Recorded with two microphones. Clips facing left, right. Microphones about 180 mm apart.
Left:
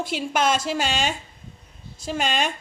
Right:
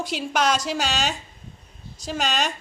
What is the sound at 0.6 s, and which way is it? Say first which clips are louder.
Speech: left 1 dB; 50° left (ahead or behind).